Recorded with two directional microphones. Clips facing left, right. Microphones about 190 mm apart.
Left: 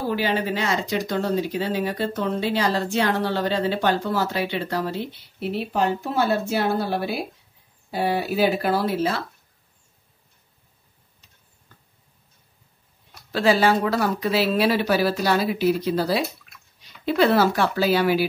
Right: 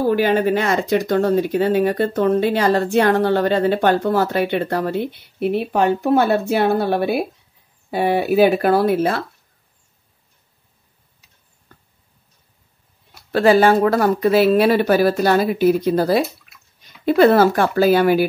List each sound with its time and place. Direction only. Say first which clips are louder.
0.1 s speech: right 5 dB; 50° right (ahead or behind)
13.3 s speech: right 6 dB; 50° right (ahead or behind)
16.5 s bathtub: left 1 dB; 5° right (ahead or behind)
16.8 s speech: right 7 dB; 50° right (ahead or behind)